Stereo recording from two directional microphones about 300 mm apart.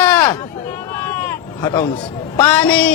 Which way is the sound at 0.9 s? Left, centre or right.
Centre.